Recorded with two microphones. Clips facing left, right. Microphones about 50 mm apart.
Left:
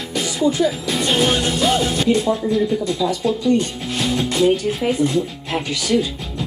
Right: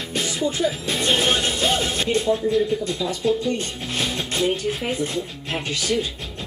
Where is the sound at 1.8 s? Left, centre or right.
Right.